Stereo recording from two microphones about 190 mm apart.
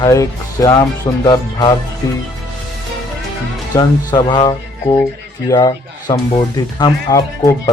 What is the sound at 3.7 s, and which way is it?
A man's voice, 20° left (ahead or behind).